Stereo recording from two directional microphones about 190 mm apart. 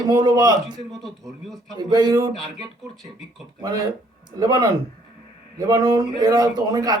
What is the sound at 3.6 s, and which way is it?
A man's voice, 20° right (ahead or behind).